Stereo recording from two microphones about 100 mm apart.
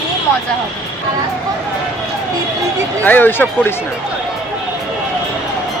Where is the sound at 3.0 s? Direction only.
20° left (ahead or behind).